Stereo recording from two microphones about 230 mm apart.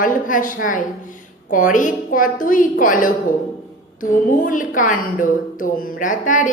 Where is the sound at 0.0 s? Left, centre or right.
Left.